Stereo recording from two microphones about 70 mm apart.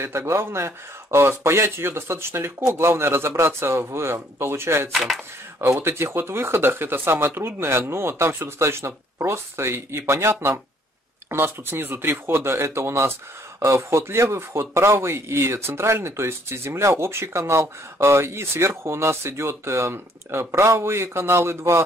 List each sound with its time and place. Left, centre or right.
0.0 s speech: right
4.9 s speech: centre
5.6 s speech: right
11.2 s speech: right